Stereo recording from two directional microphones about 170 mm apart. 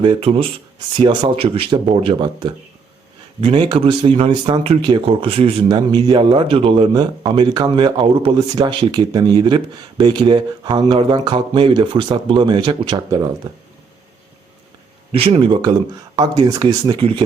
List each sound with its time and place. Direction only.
0.0 s speech: 30° right (ahead or behind)
15.1 s speech: 35° right (ahead or behind)